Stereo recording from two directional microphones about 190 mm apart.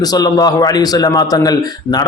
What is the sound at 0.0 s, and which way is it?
A man's voice, 20° left (ahead or behind).